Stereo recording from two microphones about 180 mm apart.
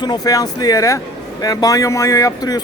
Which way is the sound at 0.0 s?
20° left (ahead or behind).